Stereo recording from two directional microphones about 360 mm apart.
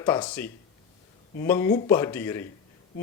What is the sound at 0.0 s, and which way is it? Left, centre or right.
A man's voice, centre.